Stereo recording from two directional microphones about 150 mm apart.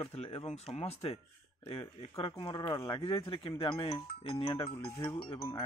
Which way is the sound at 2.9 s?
35° left (ahead or behind).